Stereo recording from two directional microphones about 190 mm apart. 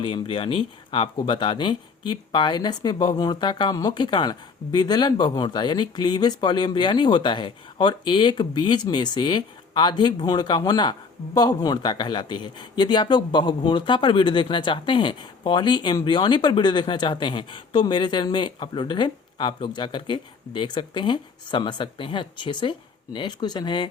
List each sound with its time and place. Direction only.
0.0 s speech: 25° left (ahead or behind)